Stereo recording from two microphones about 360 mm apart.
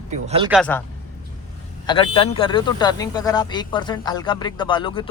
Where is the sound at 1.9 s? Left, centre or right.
Centre.